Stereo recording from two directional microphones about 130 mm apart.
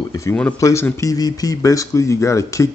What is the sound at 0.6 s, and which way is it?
Speech, 25° left (ahead or behind).